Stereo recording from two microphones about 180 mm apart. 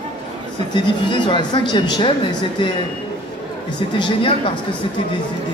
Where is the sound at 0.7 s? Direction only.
25° left (ahead or behind).